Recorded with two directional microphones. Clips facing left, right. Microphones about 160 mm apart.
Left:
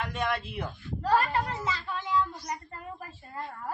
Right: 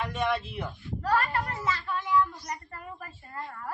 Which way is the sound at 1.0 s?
25° left (ahead or behind).